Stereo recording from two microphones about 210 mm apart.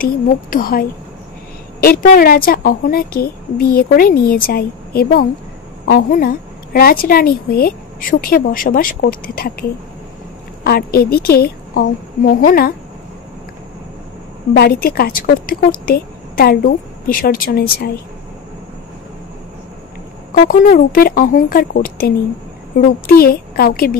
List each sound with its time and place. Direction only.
0.0 s a woman's voice: 40° left (ahead or behind)
14.5 s a woman's voice: 45° left (ahead or behind)
20.3 s a woman's voice: 40° left (ahead or behind)